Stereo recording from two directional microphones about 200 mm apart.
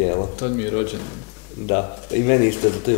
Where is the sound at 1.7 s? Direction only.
20° left (ahead or behind).